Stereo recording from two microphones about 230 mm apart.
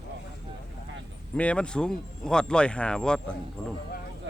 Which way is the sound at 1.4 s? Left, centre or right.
Centre.